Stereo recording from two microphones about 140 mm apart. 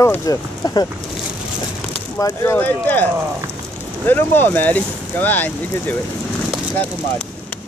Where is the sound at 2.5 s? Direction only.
10° left (ahead or behind).